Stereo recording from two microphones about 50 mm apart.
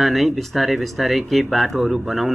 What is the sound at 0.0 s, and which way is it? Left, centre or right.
Speech, centre.